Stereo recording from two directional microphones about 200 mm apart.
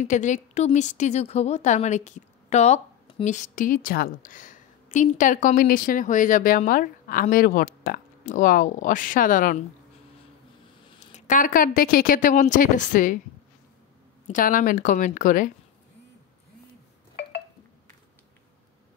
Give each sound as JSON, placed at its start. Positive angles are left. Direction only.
{"t": 0.0, "sound": "a woman's voice", "side_deg": 35}
{"t": 10.9, "sound": "a woman's voice", "side_deg": 35}
{"t": 14.2, "sound": "a woman's voice", "side_deg": 40}